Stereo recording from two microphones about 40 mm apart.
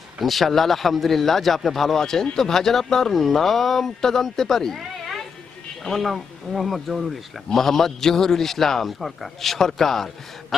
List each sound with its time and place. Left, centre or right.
0.2 s speech: centre
5.8 s speech: centre